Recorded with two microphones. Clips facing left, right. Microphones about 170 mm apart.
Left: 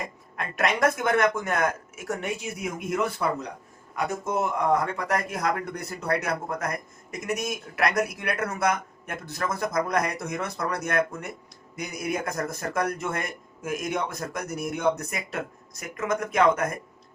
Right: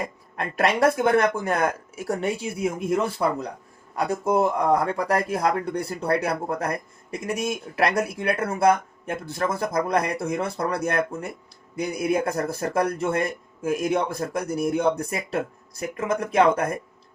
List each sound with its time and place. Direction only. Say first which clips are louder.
0.3 s speech: right 4 dB; 30° right (ahead or behind)